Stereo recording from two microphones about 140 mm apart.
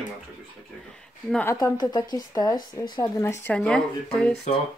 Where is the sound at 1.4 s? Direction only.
25° left (ahead or behind).